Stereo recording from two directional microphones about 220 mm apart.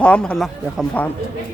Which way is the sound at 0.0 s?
5° left (ahead or behind).